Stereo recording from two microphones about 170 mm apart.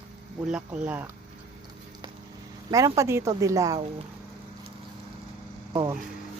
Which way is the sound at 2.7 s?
20° right (ahead or behind).